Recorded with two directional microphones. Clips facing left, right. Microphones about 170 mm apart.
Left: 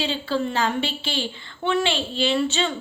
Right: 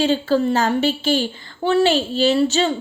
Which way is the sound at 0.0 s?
45° right (ahead or behind).